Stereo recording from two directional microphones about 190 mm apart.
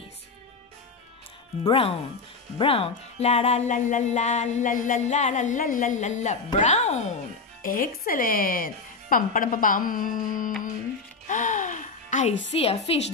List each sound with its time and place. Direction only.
1.6 s speech: 30° left (ahead or behind)
7.6 s speech: 45° left (ahead or behind)
11.2 s music: 40° left (ahead or behind)
12.5 s speech: 30° left (ahead or behind)